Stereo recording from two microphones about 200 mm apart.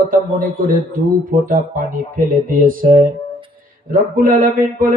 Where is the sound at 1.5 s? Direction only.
45° right (ahead or behind).